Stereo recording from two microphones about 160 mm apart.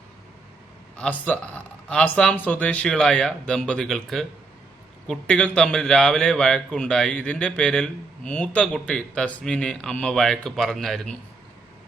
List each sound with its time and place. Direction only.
0.9 s speech: 5° left (ahead or behind)